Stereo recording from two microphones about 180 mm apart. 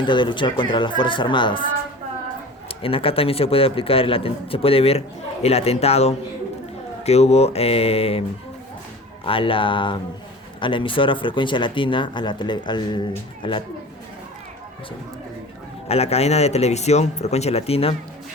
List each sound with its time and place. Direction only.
0.0 s speech: 25° left (ahead or behind)
2.6 s a man's voice: 30° left (ahead or behind)
9.2 s speech: 30° left (ahead or behind)
15.9 s a man's voice: 35° left (ahead or behind)